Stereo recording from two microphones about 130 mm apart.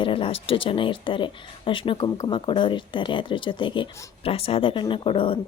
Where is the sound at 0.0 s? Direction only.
45° left (ahead or behind).